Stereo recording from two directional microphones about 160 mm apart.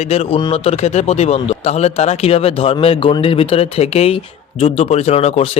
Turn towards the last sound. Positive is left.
turn(degrees=40)  # may be behind; listen again after turning